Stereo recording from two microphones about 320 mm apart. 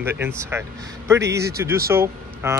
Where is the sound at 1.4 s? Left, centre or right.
Right.